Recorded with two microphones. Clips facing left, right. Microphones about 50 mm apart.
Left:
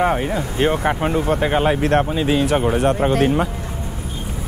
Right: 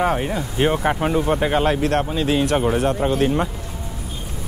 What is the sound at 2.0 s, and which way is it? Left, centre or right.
Speech, centre.